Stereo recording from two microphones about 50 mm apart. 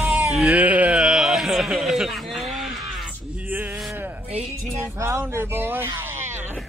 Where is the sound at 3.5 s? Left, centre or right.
Right.